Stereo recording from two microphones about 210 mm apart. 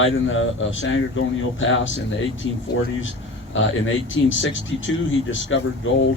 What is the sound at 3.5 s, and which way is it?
Speech, 65° left (ahead or behind).